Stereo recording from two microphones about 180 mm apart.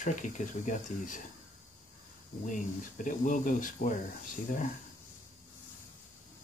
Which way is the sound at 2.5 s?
45° left (ahead or behind).